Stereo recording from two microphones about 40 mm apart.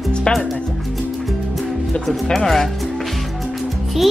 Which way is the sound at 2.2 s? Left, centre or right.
Centre.